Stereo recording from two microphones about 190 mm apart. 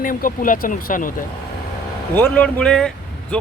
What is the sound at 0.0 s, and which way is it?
Speech, 45° left (ahead or behind).